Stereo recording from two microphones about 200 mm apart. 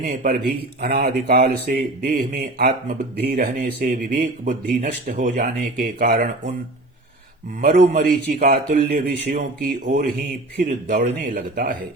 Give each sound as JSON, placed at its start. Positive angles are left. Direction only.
{"t": 0.0, "sound": "speech", "side_deg": -45}
{"t": 7.6, "sound": "speech", "side_deg": -45}